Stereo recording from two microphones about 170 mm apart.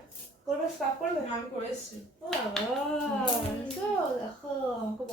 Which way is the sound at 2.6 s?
5° left (ahead or behind).